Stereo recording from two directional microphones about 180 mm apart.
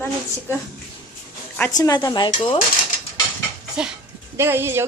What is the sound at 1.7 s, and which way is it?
Speech, 20° left (ahead or behind).